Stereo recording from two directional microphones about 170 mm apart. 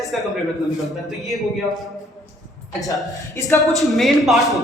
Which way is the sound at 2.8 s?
20° left (ahead or behind).